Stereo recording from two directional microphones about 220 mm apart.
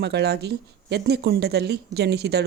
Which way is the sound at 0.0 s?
50° right (ahead or behind).